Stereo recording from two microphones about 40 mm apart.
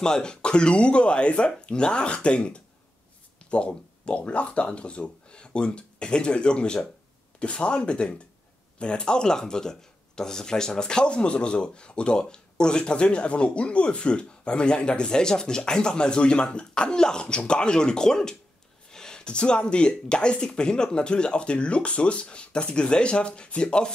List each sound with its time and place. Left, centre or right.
0.0 s speech: centre